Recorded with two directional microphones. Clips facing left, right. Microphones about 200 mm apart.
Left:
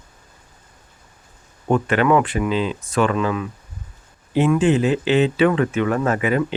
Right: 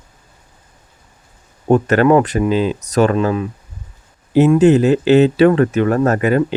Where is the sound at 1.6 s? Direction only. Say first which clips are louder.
Right 5 dB; 40° right (ahead or behind).